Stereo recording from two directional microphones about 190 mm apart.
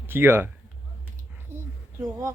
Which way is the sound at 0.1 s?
10° right (ahead or behind).